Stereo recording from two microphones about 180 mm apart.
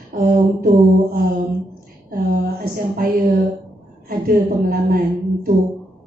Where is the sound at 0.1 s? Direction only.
55° right (ahead or behind).